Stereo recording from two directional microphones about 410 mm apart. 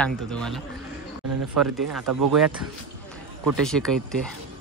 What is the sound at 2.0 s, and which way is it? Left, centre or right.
Speech, right.